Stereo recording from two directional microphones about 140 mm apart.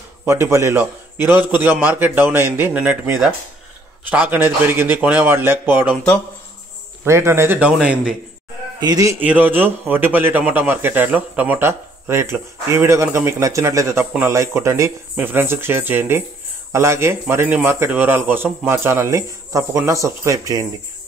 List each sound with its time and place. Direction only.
0.2 s a man's voice: 20° right (ahead or behind)
7.1 s a man's voice: 20° right (ahead or behind)
8.7 s speech: 25° right (ahead or behind)
9.2 s a man's voice: 10° right (ahead or behind)